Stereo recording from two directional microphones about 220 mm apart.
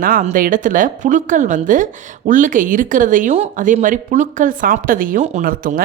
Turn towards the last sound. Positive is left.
turn(degrees=-40)  # may be behind; listen again after turning